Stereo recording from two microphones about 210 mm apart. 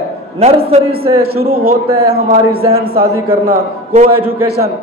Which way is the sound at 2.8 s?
45° right (ahead or behind).